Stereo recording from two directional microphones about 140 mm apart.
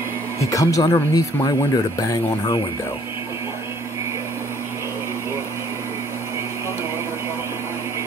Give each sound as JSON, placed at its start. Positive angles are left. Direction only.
{"t": 0.4, "sound": "speech", "side_deg": 25}